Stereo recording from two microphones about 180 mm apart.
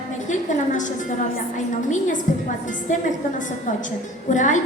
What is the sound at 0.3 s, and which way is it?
A woman's voice, 45° left (ahead or behind).